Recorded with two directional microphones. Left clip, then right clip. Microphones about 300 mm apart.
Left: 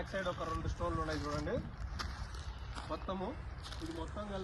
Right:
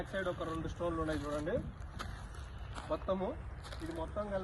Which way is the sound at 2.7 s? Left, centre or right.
Centre.